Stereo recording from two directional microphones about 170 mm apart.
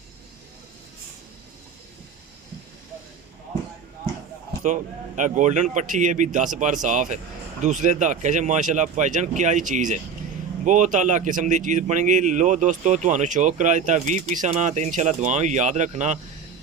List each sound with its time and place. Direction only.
4.6 s speech: 45° right (ahead or behind)